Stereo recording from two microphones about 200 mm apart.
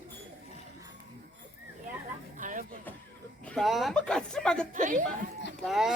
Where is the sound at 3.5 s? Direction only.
Centre (ahead or behind).